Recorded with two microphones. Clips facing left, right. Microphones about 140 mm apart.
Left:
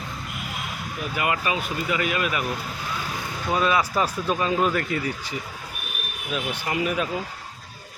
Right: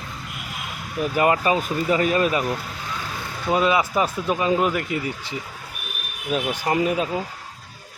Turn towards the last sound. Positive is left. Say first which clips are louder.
# right 4 dB
turn(degrees=-30)  # may be behind; listen again after turning